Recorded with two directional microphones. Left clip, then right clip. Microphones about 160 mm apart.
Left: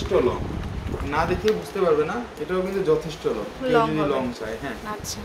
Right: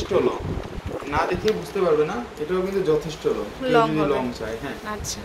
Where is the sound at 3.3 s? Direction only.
5° left (ahead or behind).